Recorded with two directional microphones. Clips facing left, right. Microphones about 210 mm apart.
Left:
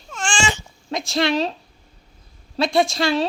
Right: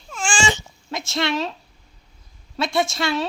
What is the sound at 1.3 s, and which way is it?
Speech, 25° left (ahead or behind).